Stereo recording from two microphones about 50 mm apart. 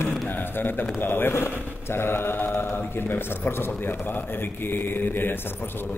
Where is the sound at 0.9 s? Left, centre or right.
Left.